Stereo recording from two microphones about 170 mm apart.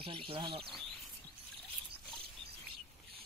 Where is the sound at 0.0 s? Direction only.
30° right (ahead or behind).